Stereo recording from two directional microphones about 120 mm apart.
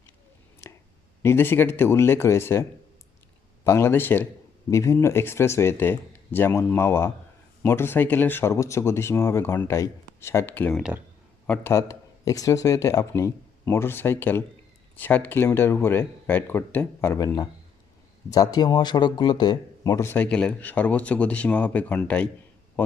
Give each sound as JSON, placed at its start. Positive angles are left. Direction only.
{"t": 1.2, "sound": "speech", "side_deg": 20}
{"t": 11.7, "sound": "speech", "side_deg": 25}
{"t": 18.3, "sound": "a man's voice", "side_deg": 30}
{"t": 20.2, "sound": "speech", "side_deg": 10}